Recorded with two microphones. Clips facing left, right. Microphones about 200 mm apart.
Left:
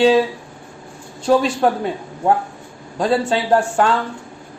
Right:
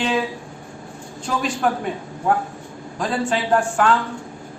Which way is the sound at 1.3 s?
30° left (ahead or behind).